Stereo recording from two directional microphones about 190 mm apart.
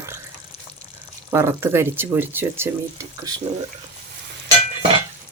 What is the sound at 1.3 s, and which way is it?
Speech, 15° right (ahead or behind).